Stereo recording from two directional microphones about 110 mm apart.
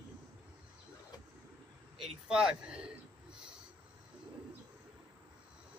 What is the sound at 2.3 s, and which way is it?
Speech, 5° right (ahead or behind).